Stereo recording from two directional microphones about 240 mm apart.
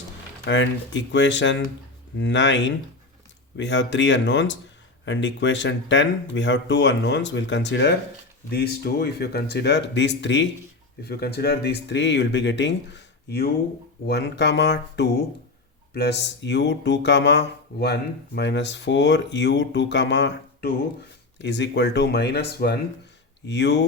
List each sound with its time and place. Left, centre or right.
0.4 s speech: left